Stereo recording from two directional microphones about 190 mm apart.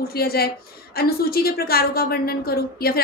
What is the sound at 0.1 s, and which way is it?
A woman's voice, 55° left (ahead or behind).